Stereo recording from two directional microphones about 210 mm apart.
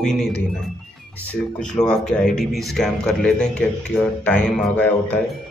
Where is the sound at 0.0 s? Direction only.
5° left (ahead or behind).